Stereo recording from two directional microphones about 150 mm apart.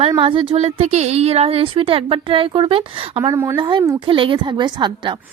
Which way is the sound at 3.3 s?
25° right (ahead or behind).